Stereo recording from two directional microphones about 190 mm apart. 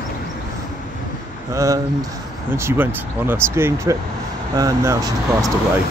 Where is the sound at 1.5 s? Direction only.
15° right (ahead or behind).